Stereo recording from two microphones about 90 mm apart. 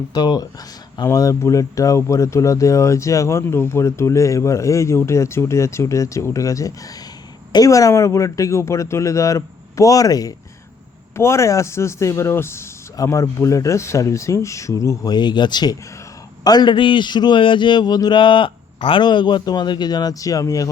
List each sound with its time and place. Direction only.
0.1 s a man's voice: 45° left (ahead or behind)
11.1 s speech: 30° left (ahead or behind)
15.1 s a man's voice: 55° left (ahead or behind); by 19.0 s 75° left (ahead or behind)
19.0 s a man's voice: 55° left (ahead or behind); by 20.7 s 40° left (ahead or behind)